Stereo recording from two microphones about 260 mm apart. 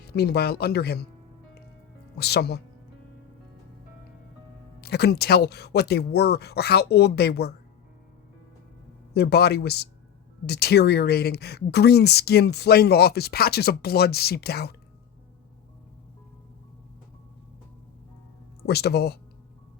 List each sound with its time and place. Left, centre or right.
0.0 s speech: left
2.1 s speech: left
4.8 s speech: left
9.1 s speech: left
18.6 s speech: left